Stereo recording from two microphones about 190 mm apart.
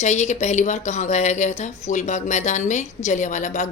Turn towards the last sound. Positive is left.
turn(degrees=40)  # may be behind; listen again after turning